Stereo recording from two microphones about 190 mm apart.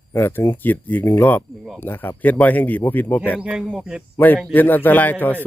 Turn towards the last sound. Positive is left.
turn(degrees=10)  # may be behind; listen again after turning